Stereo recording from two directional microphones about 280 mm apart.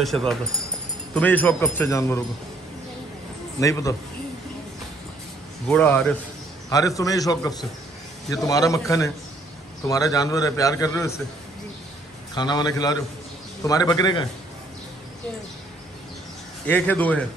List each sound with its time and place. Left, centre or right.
0.0 s a man's voice: centre
3.5 s a man's voice: centre
5.7 s a man's voice: centre
12.4 s a man's voice: centre
16.6 s a man's voice: centre